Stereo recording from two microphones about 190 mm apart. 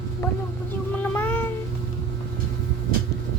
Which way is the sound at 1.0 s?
10° left (ahead or behind).